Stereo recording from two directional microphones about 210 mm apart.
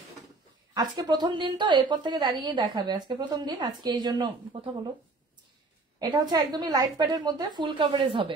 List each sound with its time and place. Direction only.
0.7 s a woman's voice: 20° right (ahead or behind)
5.9 s a woman's voice: 20° right (ahead or behind)